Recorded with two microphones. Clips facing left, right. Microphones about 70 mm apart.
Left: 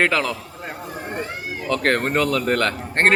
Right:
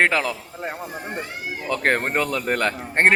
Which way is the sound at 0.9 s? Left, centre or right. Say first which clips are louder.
Left 2 dB; left.